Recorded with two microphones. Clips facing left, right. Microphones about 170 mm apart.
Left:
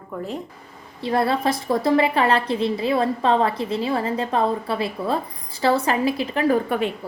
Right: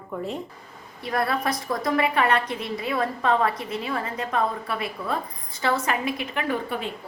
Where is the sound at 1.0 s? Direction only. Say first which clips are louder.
Left 5 dB; 25° left (ahead or behind).